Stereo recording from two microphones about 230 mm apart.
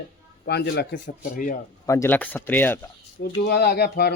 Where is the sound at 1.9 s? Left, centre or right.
Centre.